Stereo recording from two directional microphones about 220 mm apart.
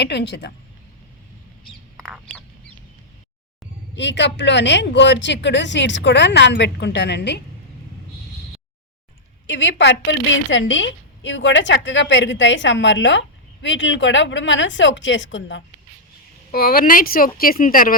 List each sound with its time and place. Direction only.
0.0 s speech: 50° left (ahead or behind)
2.0 s duck: centre (ahead or behind)
3.9 s speech: 55° left (ahead or behind)
9.5 s a woman's voice: 55° left (ahead or behind)
16.5 s a woman's voice: 40° left (ahead or behind)